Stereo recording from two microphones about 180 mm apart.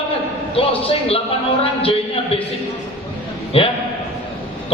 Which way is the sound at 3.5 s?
30° left (ahead or behind).